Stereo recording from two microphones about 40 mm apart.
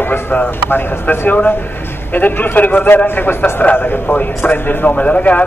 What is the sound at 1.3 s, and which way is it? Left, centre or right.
A man's voice, left.